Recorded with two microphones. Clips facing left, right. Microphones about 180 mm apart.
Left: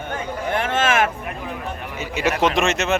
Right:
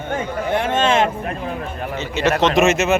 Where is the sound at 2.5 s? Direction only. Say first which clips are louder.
Right 5 dB; 5° right (ahead or behind).